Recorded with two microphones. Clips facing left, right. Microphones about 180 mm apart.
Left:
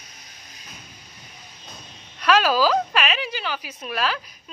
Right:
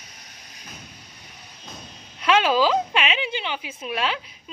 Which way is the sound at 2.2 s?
25° right (ahead or behind).